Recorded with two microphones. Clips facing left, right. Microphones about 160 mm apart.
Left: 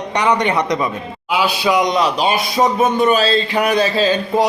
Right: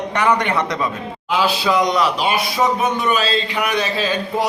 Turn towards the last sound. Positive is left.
turn(degrees=30)  # may be behind; listen again after turning